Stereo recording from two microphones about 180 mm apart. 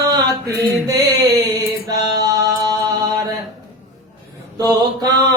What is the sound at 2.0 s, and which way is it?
Mantra, 20° right (ahead or behind).